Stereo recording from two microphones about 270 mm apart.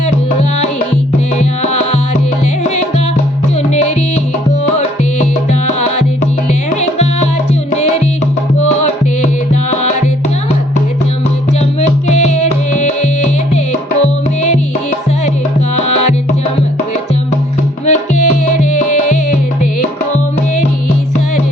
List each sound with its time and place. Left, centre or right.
1.4 s music: left
5.2 s music: left
6.5 s music: left
11.8 s music: left
15.7 s music: left
17.8 s music: left